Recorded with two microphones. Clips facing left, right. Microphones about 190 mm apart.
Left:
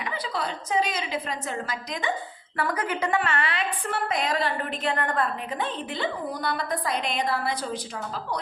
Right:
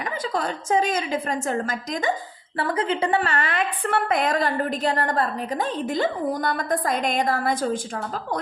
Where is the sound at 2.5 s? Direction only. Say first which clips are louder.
Right 4 dB; 30° right (ahead or behind).